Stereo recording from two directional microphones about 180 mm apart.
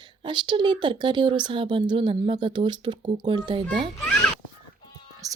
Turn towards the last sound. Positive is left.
turn(degrees=-20)  # may be behind; listen again after turning